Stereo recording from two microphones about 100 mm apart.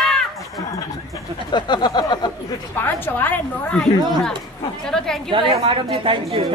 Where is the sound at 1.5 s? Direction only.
50° left (ahead or behind).